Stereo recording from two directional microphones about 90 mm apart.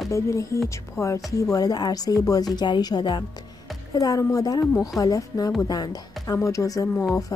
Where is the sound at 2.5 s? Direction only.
55° left (ahead or behind).